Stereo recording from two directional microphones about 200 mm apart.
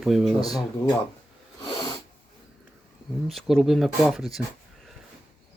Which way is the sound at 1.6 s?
20° left (ahead or behind).